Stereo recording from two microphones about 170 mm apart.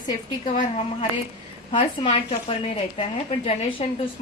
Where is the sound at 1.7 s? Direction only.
35° left (ahead or behind).